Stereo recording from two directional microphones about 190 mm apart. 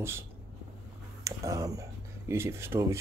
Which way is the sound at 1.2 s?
15° right (ahead or behind).